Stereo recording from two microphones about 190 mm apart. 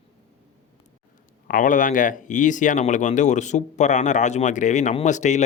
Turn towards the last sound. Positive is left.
turn(degrees=40)  # may be behind; listen again after turning